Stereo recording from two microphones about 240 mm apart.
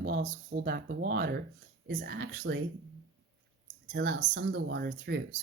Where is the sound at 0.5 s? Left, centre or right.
Right.